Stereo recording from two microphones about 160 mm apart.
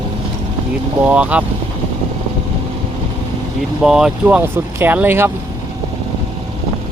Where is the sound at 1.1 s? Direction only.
10° right (ahead or behind).